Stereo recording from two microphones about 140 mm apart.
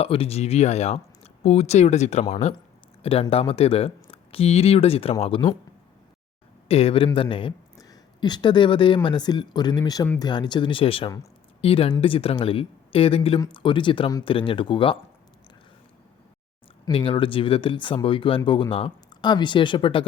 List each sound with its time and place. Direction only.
0.0 s speech: 45° left (ahead or behind)
6.7 s speech: 45° left (ahead or behind)
7.8 s speech: 30° left (ahead or behind)
16.8 s speech: 40° left (ahead or behind)